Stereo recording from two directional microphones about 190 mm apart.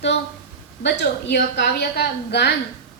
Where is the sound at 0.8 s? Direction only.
60° left (ahead or behind).